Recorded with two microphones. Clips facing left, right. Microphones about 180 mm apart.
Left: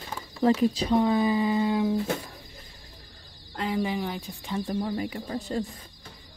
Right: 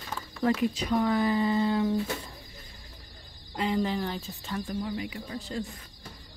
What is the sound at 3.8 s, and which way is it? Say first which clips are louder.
Speech: left 1 dB; 10° left (ahead or behind).